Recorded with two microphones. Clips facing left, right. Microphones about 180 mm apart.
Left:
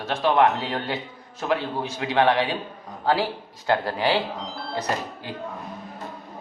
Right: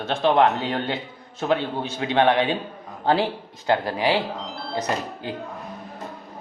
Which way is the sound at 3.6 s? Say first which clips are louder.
Right 1 dB; 15° right (ahead or behind).